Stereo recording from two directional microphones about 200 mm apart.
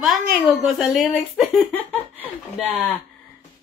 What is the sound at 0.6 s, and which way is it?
Speech, centre (ahead or behind).